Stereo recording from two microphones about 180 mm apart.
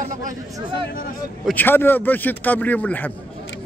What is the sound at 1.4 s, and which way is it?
A man's voice, 10° left (ahead or behind).